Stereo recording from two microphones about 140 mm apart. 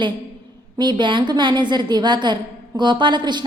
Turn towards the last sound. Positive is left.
turn(degrees=-30)  # may be behind; listen again after turning